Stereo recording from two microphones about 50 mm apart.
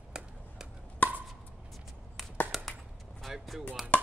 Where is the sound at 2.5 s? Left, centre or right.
Centre.